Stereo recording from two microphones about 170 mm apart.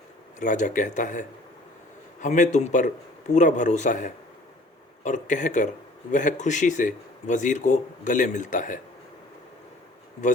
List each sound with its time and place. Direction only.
0.3 s speech: 45° left (ahead or behind)
2.2 s speech: 45° left (ahead or behind)